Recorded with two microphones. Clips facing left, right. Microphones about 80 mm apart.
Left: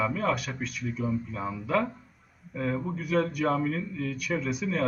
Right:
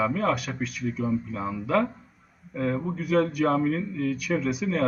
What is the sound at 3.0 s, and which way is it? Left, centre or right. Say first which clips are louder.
Speech: right 5 dB; right.